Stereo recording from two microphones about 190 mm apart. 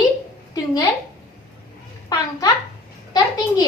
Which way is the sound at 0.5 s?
20° left (ahead or behind).